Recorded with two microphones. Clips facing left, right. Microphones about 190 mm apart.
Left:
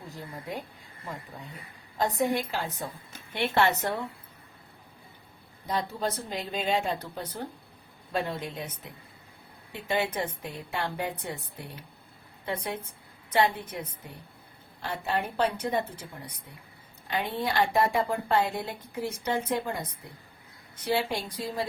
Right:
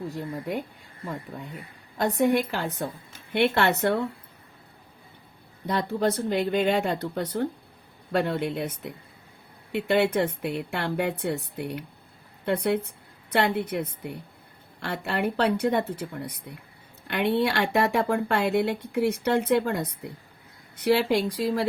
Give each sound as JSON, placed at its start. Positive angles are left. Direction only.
{"t": 0.1, "sound": "speech", "side_deg": -65}
{"t": 2.0, "sound": "speech", "side_deg": -65}
{"t": 5.6, "sound": "speech", "side_deg": -65}